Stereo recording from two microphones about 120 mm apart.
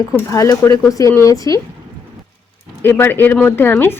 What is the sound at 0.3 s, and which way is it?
Speech, 25° left (ahead or behind).